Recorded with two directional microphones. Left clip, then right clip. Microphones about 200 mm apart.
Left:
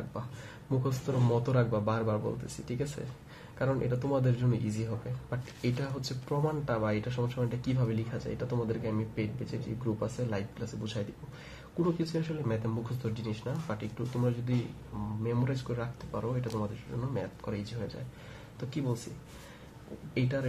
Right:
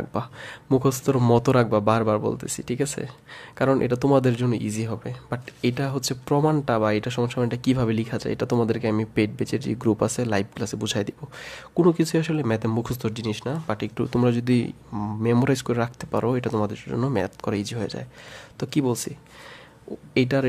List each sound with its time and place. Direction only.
0.7 s speech: 50° right (ahead or behind)
20.2 s speech: 55° right (ahead or behind)